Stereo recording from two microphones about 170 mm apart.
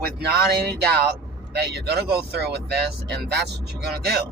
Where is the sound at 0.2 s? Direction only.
70° right (ahead or behind).